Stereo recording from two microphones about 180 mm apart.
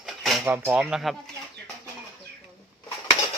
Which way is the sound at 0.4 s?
10° right (ahead or behind).